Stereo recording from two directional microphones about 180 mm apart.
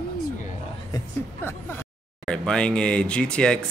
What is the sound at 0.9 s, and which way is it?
Speech, 15° left (ahead or behind).